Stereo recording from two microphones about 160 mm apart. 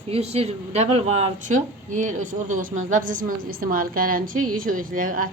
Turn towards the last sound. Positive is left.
turn(degrees=-55)  # may be behind; listen again after turning